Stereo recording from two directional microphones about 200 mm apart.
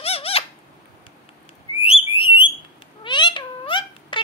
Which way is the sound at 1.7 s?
30° left (ahead or behind).